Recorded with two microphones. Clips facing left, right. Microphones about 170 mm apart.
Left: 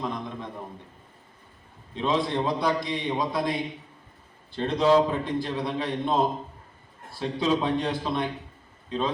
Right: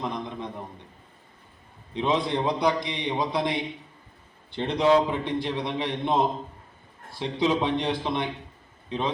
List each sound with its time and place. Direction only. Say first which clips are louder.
0.0 s a man's voice: even; 20° right (ahead or behind)
1.9 s a man's voice: right 1 dB; 20° right (ahead or behind)